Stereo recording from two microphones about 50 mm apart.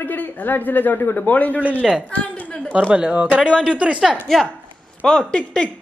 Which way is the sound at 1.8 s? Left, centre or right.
Centre.